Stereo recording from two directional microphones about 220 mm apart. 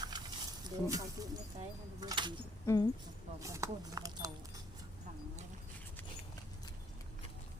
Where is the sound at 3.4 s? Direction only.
15° right (ahead or behind).